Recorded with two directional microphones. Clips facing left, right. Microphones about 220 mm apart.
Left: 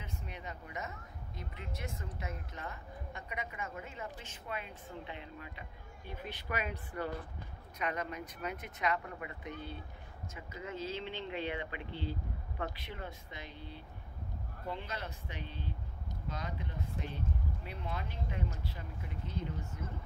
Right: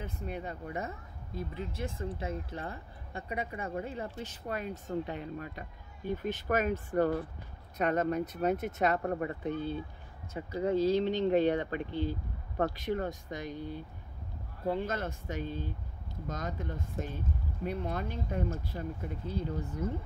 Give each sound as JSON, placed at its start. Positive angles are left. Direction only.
{"t": 0.0, "sound": "speech", "side_deg": -35}
{"t": 19.3, "sound": "speech", "side_deg": -35}